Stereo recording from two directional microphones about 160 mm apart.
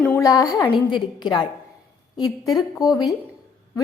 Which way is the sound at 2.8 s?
25° left (ahead or behind).